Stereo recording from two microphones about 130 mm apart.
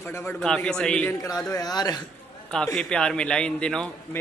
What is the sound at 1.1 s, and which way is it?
Speech, 20° left (ahead or behind).